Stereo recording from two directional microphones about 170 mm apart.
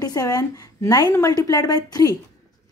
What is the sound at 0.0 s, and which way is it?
A woman's voice, 20° left (ahead or behind).